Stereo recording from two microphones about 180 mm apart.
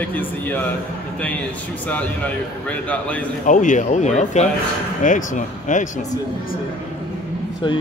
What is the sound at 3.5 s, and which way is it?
Speech, 45° left (ahead or behind).